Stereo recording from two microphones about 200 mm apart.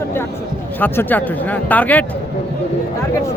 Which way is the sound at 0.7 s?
10° left (ahead or behind).